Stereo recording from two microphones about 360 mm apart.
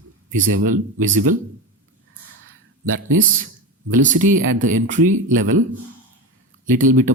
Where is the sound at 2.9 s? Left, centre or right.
Right.